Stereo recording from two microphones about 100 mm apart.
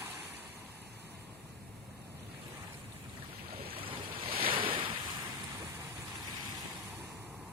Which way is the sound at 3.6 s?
65° right (ahead or behind).